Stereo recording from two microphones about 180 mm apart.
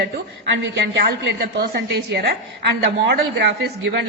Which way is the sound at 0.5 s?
85° right.